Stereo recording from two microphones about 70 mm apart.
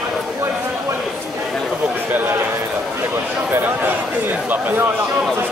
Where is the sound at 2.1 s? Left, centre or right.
Right.